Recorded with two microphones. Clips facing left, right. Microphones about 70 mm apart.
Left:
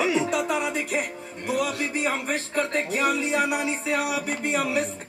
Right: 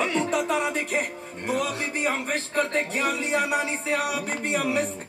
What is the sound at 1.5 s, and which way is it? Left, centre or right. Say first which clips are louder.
Speech: left 1 dB; right.